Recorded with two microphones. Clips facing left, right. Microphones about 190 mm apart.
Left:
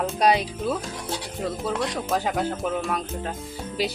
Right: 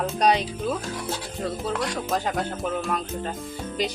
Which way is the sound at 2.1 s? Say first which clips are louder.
Left 3 dB; 5° left (ahead or behind).